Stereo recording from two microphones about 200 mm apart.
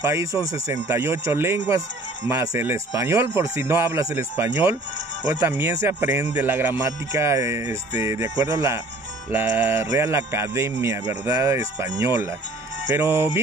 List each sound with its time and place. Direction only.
0.1 s speech: 15° right (ahead or behind)